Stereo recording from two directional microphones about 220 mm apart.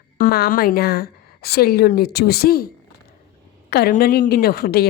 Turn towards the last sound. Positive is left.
turn(degrees=45)  # may be behind; listen again after turning